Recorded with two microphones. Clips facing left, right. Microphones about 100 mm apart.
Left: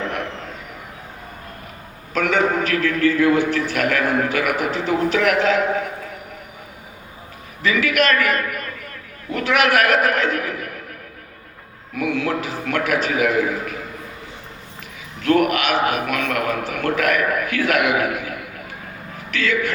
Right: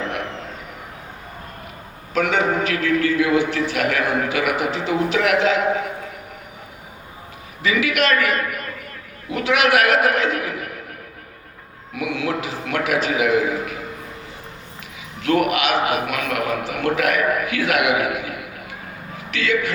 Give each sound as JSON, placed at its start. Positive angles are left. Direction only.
{"t": 2.1, "sound": "a man's voice", "side_deg": 45}
{"t": 7.6, "sound": "a man's voice", "side_deg": 45}
{"t": 11.9, "sound": "a man's voice", "side_deg": 45}
{"t": 15.2, "sound": "a man's voice", "side_deg": 45}